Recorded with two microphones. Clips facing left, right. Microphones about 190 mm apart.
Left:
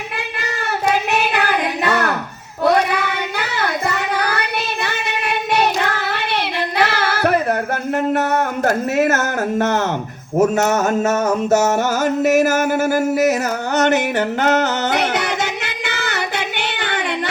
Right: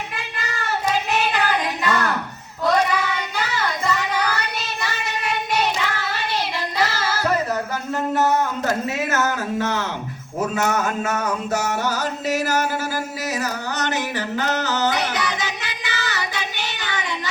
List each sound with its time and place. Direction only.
2.6 s child singing: 65° left (ahead or behind)
10.3 s music: 45° left (ahead or behind)
12.2 s a sound: 50° left (ahead or behind)